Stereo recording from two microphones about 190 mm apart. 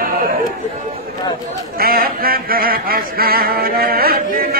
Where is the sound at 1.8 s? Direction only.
50° right (ahead or behind).